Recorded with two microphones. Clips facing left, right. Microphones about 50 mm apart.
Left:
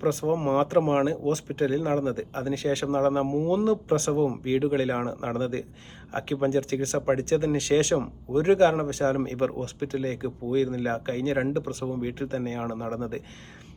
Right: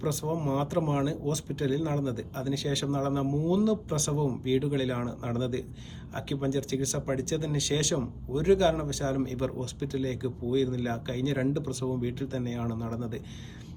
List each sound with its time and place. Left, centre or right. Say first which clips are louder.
0.0 s speech: left 6 dB; left